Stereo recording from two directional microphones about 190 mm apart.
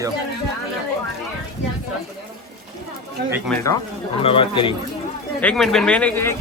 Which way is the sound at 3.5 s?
5° left (ahead or behind).